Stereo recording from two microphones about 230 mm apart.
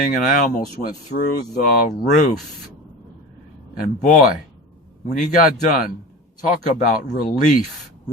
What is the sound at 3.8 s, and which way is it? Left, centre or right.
Speech, left.